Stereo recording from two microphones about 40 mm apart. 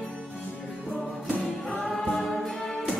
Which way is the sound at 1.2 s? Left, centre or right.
Left.